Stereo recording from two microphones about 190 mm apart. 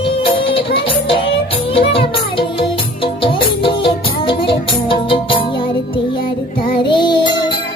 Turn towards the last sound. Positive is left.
turn(degrees=25)  # may be behind; listen again after turning